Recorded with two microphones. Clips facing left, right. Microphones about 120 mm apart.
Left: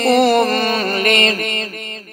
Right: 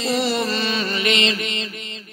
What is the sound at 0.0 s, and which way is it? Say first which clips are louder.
Music: left 9 dB; 55° left (ahead or behind).